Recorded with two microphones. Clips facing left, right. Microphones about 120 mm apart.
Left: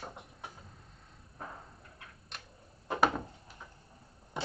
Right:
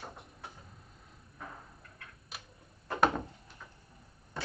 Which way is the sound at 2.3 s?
5° right (ahead or behind).